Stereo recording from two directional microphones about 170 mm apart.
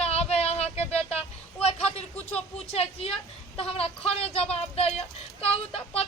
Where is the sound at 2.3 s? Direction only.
35° left (ahead or behind).